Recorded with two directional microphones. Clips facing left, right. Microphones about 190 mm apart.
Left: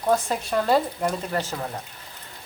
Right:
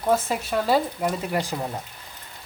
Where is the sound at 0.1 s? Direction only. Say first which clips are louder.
Even; 5° right (ahead or behind).